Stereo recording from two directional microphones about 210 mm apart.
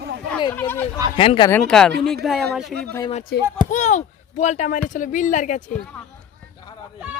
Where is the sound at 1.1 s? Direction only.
25° left (ahead or behind).